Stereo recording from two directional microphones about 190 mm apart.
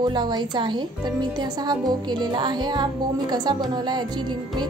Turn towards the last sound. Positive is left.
turn(degrees=-25)  # may be behind; listen again after turning